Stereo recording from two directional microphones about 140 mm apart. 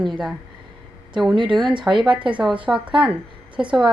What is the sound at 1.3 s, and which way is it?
Speech, 35° right (ahead or behind).